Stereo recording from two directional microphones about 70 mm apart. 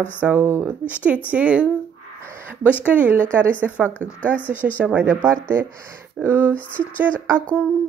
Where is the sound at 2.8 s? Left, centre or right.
Right.